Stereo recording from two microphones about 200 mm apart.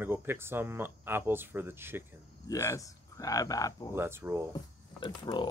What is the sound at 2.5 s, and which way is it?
Speech, 15° left (ahead or behind).